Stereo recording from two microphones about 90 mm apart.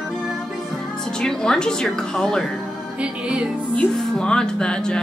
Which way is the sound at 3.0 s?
10° right (ahead or behind).